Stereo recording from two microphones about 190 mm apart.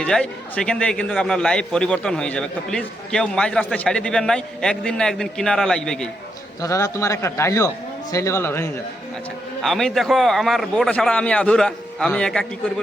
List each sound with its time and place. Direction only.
0.0 s a man's voice: 5° left (ahead or behind)
6.6 s a man's voice: 15° left (ahead or behind)
9.6 s a man's voice: centre (ahead or behind)